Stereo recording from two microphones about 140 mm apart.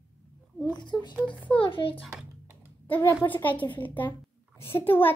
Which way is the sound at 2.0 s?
10° right (ahead or behind).